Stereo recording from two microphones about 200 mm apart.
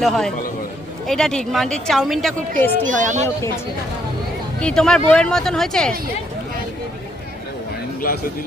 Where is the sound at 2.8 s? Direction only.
40° right (ahead or behind).